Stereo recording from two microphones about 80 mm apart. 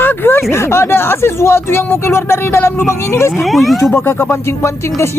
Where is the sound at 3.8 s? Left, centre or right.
Left.